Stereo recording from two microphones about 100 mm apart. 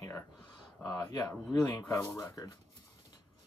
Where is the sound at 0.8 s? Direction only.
40° left (ahead or behind).